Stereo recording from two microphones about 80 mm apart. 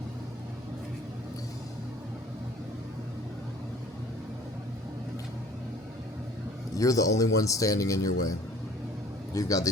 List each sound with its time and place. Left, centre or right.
6.7 s speech: left